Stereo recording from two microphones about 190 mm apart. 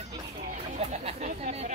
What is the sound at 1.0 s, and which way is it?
Speech, 35° right (ahead or behind).